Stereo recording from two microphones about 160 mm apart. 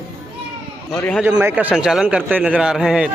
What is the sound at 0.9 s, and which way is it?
Speech, 10° left (ahead or behind).